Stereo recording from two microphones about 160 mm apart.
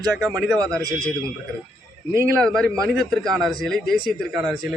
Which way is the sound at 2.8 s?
Centre (ahead or behind).